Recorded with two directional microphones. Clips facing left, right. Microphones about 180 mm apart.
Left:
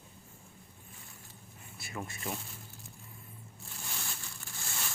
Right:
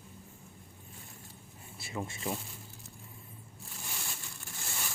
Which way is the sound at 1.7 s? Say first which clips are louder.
Right 3 dB; 25° right (ahead or behind).